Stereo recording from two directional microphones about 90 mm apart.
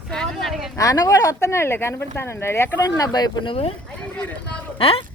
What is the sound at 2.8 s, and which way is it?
Speech, 45° left (ahead or behind).